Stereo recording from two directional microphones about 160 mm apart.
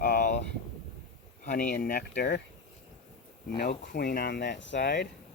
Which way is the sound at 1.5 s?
65° left (ahead or behind).